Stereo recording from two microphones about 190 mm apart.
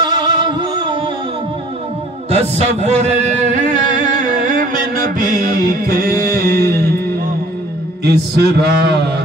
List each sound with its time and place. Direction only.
0.0 s music: 20° right (ahead or behind)
2.5 s singing: 35° right (ahead or behind); by 6.6 s 50° right (ahead or behind)
6.7 s music: 55° right (ahead or behind)
8.0 s a man's voice: 60° right (ahead or behind)